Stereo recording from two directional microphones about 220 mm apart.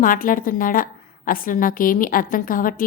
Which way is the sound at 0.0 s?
40° left (ahead or behind).